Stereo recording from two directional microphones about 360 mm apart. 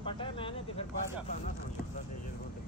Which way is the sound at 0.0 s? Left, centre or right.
Centre.